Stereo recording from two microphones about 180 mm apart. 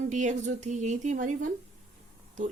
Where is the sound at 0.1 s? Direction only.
40° right (ahead or behind).